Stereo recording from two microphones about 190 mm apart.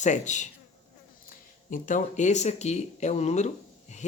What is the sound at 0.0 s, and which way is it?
Speech, 40° left (ahead or behind).